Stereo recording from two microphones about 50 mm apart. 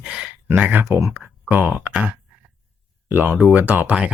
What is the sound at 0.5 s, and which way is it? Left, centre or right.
Speech, right.